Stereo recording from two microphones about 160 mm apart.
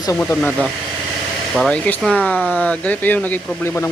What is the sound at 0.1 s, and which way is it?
Speech, 15° left (ahead or behind).